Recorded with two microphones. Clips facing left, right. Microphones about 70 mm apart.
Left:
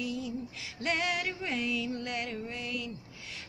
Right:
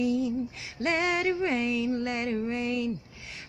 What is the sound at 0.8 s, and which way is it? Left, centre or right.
Music, right.